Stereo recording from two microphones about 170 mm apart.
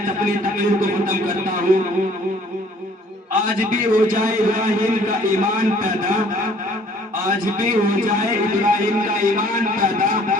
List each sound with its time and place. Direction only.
0.0 s a sound: 50° right (ahead or behind)
3.4 s a man's voice: 50° right (ahead or behind)
7.3 s a man's voice: 55° right (ahead or behind)